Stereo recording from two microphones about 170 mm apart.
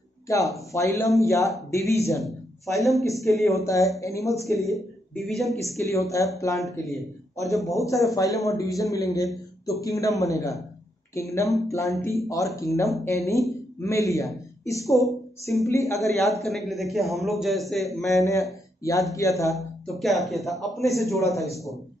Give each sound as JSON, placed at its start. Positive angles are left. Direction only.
{"t": 0.3, "sound": "speech", "side_deg": 20}
{"t": 2.2, "sound": "a man's voice", "side_deg": 0}
{"t": 3.4, "sound": "a man's voice", "side_deg": 20}
{"t": 5.2, "sound": "a man's voice", "side_deg": 0}
{"t": 5.8, "sound": "a man's voice", "side_deg": 15}
{"t": 6.6, "sound": "a man's voice", "side_deg": 0}
{"t": 7.3, "sound": "a man's voice", "side_deg": 20}
{"t": 16.4, "sound": "a man's voice", "side_deg": 0}
{"t": 18.1, "sound": "a man's voice", "side_deg": 20}
{"t": 19.5, "sound": "a man's voice", "side_deg": 0}